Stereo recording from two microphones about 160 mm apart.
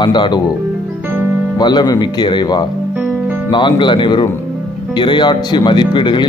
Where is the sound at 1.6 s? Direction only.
25° left (ahead or behind).